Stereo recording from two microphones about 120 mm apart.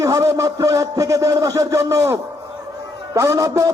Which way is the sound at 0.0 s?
25° right (ahead or behind).